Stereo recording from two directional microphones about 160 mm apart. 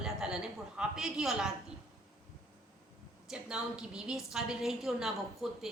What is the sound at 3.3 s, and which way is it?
A woman's voice, 5° right (ahead or behind).